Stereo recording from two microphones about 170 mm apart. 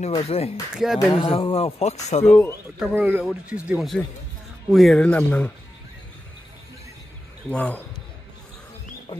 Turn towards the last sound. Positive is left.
turn(degrees=10)  # may be behind; listen again after turning